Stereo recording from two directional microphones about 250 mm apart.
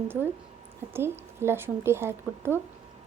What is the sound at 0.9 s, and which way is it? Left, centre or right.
A woman's voice, centre.